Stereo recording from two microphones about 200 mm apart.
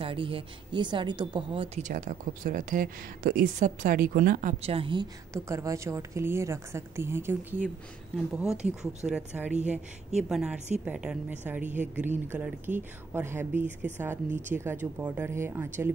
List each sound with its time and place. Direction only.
0.0 s speech: 25° right (ahead or behind)
5.3 s a woman's voice: 15° right (ahead or behind)
9.0 s a woman's voice: 5° right (ahead or behind)